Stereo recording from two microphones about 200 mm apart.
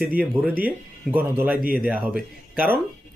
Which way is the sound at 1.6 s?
45° right (ahead or behind).